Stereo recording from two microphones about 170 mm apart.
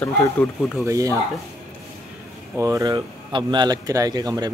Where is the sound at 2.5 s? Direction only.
20° right (ahead or behind).